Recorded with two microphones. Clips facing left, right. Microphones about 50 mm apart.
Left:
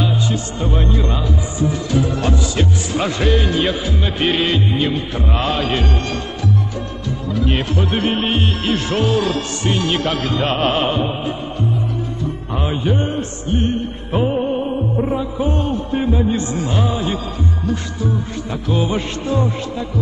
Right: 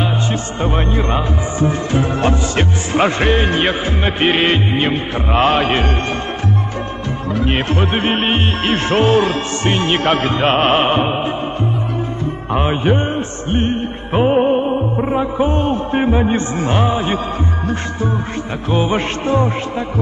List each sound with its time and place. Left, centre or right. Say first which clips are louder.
0.0 s speech: right 1 dB; right
7.3 s speech: right 2 dB; right
12.5 s music: right 4 dB; right
18.7 s speech: right 3 dB; right